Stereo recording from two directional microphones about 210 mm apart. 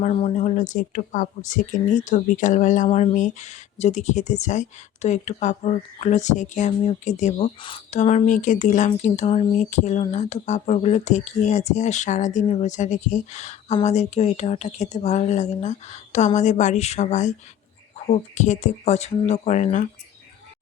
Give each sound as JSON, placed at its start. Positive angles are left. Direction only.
{"t": 0.0, "sound": "speech", "side_deg": 30}